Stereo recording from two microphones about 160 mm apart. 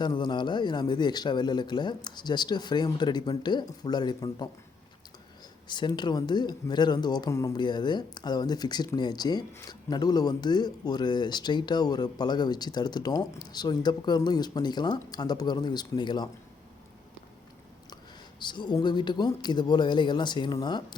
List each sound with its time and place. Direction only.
0.0 s speech: 30° left (ahead or behind)
5.6 s speech: 30° left (ahead or behind)
18.3 s speech: 30° left (ahead or behind)